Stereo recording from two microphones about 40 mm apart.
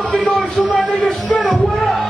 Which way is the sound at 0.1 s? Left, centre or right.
Centre.